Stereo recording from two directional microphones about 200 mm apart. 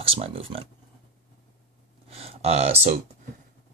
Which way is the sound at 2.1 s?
30° right (ahead or behind).